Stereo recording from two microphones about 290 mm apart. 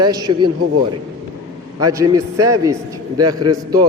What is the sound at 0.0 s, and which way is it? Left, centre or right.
Speech, centre.